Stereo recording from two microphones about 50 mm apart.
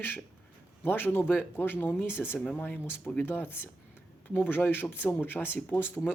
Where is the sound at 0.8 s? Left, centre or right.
Left.